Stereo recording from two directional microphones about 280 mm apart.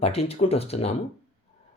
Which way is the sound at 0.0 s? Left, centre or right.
Left.